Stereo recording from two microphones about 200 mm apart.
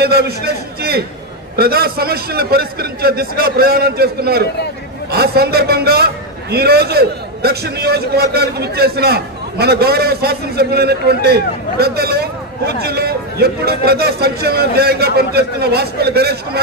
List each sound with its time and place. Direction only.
0.0 s a man's voice: 50° right (ahead or behind)